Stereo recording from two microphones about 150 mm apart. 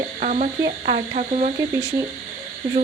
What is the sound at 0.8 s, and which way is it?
Speech, 45° right (ahead or behind).